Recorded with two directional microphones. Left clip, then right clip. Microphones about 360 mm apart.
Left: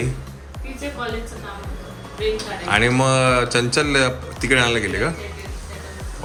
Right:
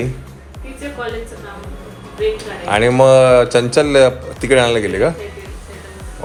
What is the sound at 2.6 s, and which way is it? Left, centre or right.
A man's voice, centre.